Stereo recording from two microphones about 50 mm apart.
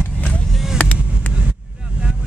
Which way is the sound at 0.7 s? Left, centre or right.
Left.